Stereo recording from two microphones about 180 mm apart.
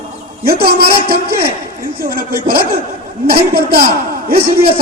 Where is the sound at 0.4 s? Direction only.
60° right (ahead or behind).